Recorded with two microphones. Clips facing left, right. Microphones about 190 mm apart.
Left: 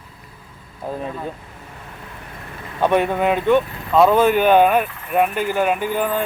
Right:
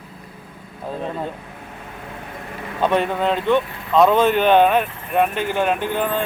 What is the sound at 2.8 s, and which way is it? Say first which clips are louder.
A man's voice: left 2 dB; 10° left (ahead or behind).